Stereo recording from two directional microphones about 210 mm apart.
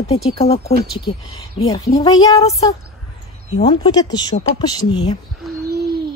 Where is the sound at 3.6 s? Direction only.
30° left (ahead or behind).